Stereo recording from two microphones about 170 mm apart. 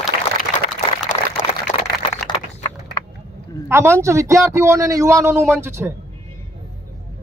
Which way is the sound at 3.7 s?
15° right (ahead or behind).